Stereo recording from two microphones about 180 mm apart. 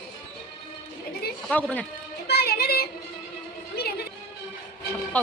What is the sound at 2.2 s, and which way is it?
Music, 60° left (ahead or behind).